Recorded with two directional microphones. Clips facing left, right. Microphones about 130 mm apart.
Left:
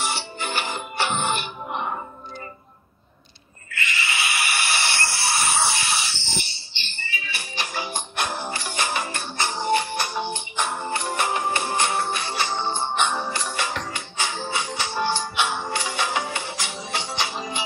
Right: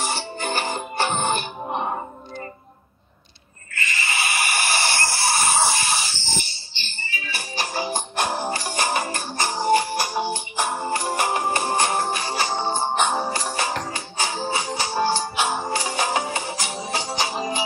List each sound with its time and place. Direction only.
0.0 s music: 40° right (ahead or behind)
3.7 s a sound: 40° right (ahead or behind)
9.9 s music: 35° right (ahead or behind)